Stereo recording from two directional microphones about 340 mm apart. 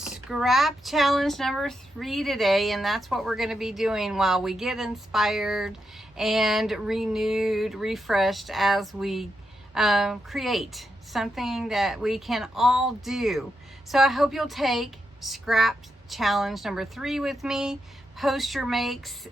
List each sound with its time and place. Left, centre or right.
0.0 s speech: centre